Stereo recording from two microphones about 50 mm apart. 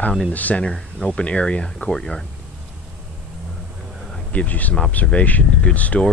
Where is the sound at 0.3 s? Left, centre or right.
Left; by 2.2 s centre.